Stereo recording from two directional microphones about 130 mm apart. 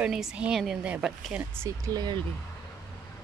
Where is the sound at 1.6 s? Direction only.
30° right (ahead or behind).